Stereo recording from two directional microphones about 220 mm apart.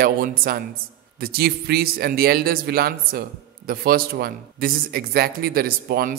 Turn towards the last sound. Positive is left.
turn(degrees=-45)  # may be behind; listen again after turning